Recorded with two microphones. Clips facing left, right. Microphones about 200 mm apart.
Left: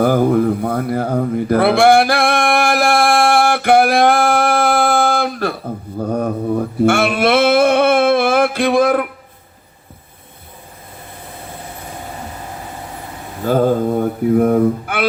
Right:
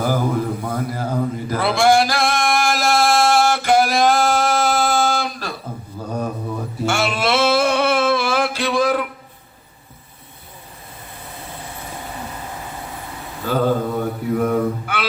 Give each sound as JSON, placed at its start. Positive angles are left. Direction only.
{"t": 0.0, "sound": "mantra", "side_deg": 60}
{"t": 6.0, "sound": "a sound", "side_deg": 55}
{"t": 13.4, "sound": "mantra", "side_deg": 45}